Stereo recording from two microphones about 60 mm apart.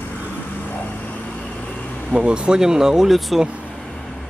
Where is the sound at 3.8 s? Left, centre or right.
Centre.